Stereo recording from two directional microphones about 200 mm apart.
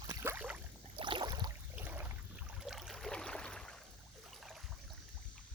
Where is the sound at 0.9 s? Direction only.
25° right (ahead or behind).